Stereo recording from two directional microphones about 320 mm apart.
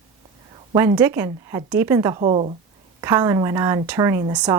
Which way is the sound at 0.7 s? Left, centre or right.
Centre.